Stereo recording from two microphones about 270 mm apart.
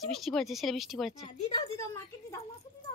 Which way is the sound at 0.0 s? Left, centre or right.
Centre.